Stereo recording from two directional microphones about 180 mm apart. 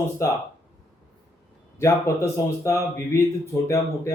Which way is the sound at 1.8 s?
15° left (ahead or behind).